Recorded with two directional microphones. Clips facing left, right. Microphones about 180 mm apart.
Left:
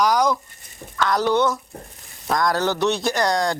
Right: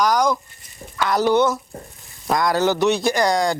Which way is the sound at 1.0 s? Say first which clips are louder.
Right 2 dB; 10° right (ahead or behind).